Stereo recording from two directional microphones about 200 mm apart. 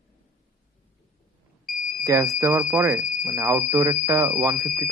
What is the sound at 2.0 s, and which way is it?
Speech, 15° right (ahead or behind).